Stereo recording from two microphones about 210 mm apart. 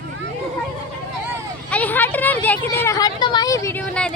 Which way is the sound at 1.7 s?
5° left (ahead or behind).